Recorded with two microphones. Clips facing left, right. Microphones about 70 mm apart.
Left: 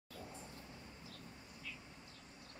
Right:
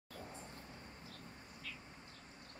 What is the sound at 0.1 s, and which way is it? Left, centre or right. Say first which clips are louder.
Vehicle: right 1 dB; right.